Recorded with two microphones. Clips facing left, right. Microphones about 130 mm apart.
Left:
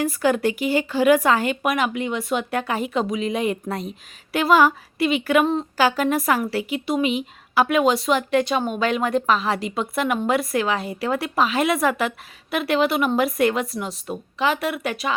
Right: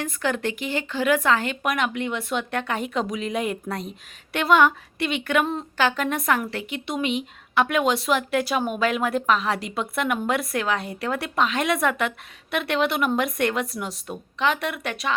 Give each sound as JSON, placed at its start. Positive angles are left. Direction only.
{"t": 0.0, "sound": "speech", "side_deg": 10}